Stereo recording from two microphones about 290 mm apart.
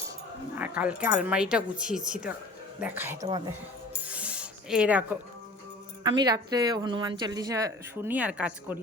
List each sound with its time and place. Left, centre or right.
0.5 s a woman's voice: centre
3.2 s a woman's voice: centre
4.1 s a sound: centre
6.0 s a woman's voice: centre